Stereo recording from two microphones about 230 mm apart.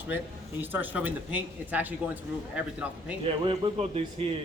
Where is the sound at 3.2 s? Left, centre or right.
Right.